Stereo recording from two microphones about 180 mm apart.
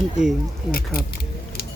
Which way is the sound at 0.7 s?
55° left (ahead or behind).